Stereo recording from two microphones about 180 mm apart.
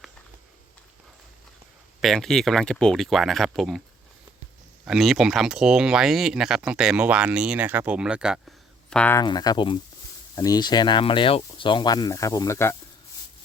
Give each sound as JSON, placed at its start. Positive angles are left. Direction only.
{"t": 2.0, "sound": "speech", "side_deg": 0}
{"t": 4.9, "sound": "speech", "side_deg": 0}
{"t": 9.1, "sound": "speech", "side_deg": 20}